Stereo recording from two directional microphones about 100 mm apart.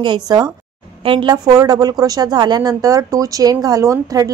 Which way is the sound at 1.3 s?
35° right (ahead or behind).